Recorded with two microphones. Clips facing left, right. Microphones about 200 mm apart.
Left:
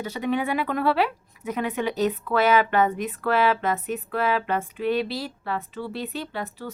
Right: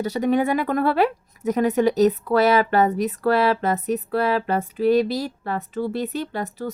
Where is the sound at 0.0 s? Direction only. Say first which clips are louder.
Right 6 dB; 40° right (ahead or behind).